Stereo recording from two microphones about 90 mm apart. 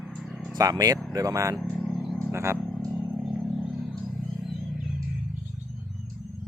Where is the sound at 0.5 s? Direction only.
45° right (ahead or behind); by 2.6 s 30° right (ahead or behind).